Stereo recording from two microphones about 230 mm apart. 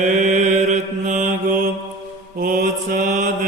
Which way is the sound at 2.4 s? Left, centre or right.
Right.